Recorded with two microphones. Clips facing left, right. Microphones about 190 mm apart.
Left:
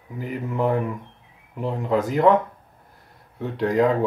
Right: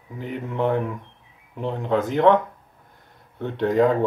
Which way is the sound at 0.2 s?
5° left (ahead or behind).